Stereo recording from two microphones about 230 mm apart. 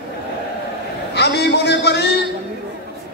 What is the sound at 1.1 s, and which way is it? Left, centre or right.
Speech, left.